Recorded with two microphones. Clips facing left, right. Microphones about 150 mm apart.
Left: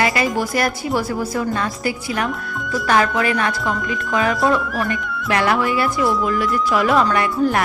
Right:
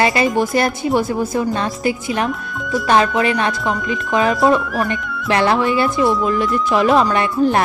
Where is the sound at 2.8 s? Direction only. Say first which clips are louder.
Right 2 dB; 25° right (ahead or behind).